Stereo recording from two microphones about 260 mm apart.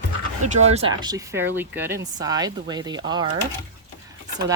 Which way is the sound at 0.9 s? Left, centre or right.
Centre.